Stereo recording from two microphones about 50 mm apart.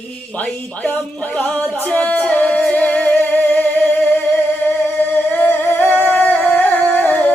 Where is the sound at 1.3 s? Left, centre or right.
Centre.